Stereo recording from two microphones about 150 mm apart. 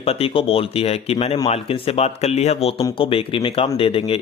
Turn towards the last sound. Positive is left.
turn(degrees=40)  # may be behind; listen again after turning